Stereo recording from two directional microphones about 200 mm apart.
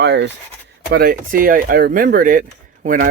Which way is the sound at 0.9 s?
45° right (ahead or behind).